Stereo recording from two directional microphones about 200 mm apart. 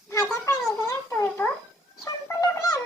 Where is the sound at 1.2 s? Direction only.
10° left (ahead or behind).